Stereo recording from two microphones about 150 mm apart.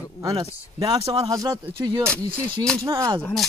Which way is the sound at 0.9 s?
40° right (ahead or behind).